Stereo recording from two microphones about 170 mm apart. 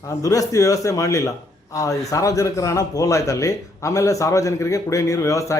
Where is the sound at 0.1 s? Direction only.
20° left (ahead or behind).